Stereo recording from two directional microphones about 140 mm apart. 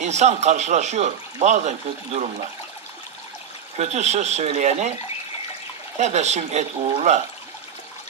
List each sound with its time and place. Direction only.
0.0 s speech: 55° right (ahead or behind)
3.8 s speech: 50° right (ahead or behind)
6.0 s speech: 50° right (ahead or behind)